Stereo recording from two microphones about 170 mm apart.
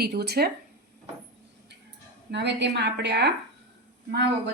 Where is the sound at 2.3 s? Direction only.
90° right.